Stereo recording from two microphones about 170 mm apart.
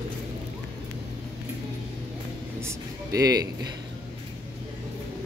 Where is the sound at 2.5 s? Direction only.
20° right (ahead or behind).